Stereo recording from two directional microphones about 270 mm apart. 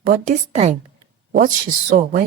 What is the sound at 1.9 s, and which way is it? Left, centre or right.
Speech, right.